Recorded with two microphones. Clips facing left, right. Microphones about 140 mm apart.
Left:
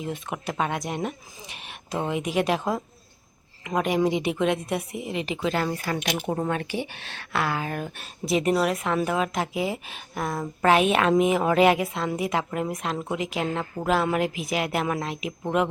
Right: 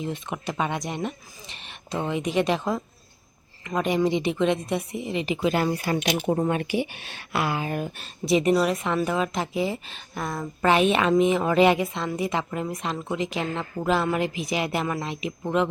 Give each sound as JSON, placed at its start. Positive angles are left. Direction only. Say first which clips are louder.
{"t": 0.0, "sound": "a woman's voice", "louder": "right 1 dB", "side_deg": 5}
{"t": 5.5, "sound": "speech", "louder": "right 3 dB", "side_deg": -15}
{"t": 6.3, "sound": "speech", "louder": "right 3 dB", "side_deg": -15}
{"t": 7.9, "sound": "a woman's voice", "louder": "right 3 dB", "side_deg": 0}